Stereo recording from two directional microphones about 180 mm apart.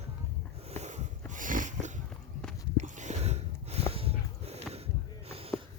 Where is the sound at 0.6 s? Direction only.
35° right (ahead or behind).